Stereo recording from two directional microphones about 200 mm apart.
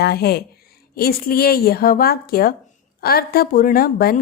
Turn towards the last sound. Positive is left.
turn(degrees=45)  # may be behind; listen again after turning